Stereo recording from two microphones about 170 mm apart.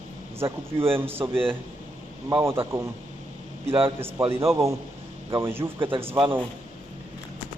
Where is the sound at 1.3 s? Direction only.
30° right (ahead or behind).